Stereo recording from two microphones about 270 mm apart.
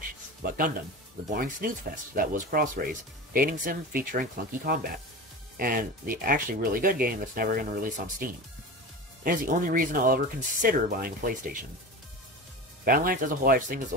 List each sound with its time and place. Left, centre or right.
0.4 s speech: right
12.8 s speech: right